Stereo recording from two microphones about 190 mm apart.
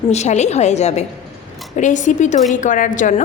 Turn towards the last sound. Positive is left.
turn(degrees=40)  # may be behind; listen again after turning